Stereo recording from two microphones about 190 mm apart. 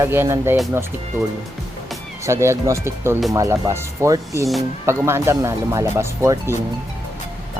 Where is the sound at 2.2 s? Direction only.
15° right (ahead or behind).